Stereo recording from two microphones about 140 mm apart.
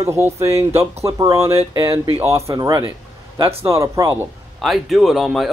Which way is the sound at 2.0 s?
45° right (ahead or behind).